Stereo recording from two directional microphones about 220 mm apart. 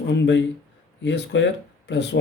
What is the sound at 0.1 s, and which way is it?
Speech, 55° left (ahead or behind).